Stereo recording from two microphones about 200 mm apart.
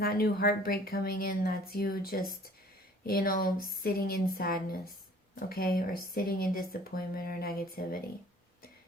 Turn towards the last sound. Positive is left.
turn(degrees=50)  # may be behind; listen again after turning